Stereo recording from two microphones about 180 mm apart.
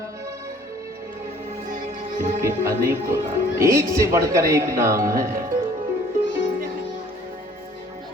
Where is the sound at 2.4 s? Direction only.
15° right (ahead or behind).